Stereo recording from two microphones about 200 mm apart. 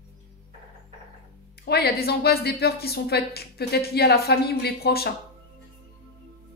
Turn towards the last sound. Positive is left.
turn(degrees=50)  # may be behind; listen again after turning